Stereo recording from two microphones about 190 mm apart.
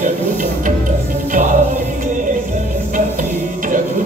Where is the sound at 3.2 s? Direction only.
45° right (ahead or behind).